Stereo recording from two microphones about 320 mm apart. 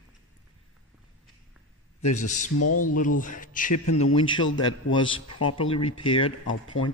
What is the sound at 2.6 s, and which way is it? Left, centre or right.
Speech, left.